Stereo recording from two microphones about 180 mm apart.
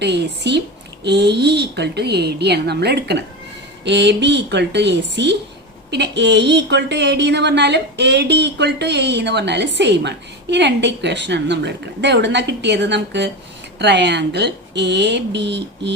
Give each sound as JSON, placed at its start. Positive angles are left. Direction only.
{"t": 0.0, "sound": "speech", "side_deg": -70}